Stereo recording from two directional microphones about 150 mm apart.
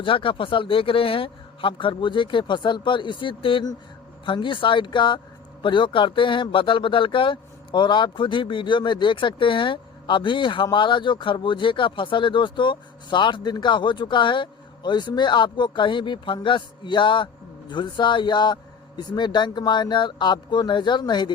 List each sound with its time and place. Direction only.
0.0 s speech: 35° left (ahead or behind)